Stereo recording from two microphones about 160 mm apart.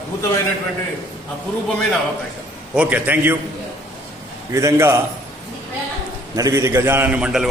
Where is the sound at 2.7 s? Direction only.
10° right (ahead or behind).